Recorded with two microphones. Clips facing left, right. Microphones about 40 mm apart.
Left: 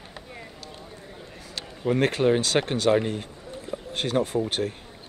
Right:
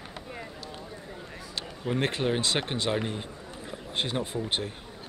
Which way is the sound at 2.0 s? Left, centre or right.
Right.